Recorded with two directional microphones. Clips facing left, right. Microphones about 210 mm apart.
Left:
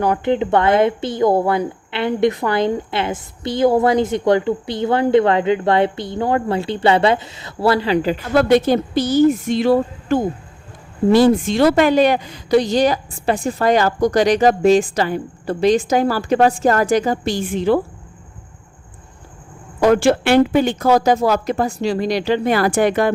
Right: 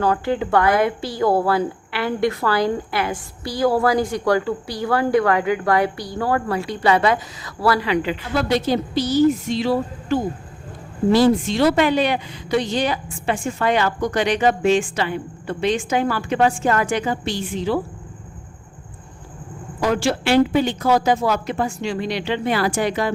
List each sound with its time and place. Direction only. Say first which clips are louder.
0.0 s a woman's voice: left 3 dB; 20° left (ahead or behind); by 17.7 s 55° left (ahead or behind)
19.8 s speech: left 6 dB; 55° left (ahead or behind)